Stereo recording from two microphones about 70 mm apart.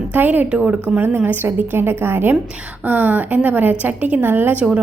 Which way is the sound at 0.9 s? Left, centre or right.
Right.